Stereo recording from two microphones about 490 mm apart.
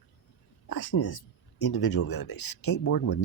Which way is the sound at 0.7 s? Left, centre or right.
Left.